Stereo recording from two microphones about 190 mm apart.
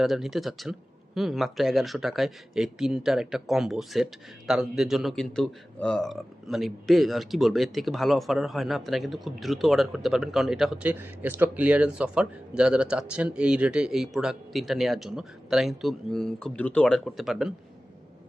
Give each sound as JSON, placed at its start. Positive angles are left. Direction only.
{"t": 0.0, "sound": "speech", "side_deg": 0}